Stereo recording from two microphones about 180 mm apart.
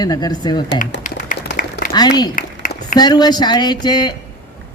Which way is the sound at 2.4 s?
45° left (ahead or behind).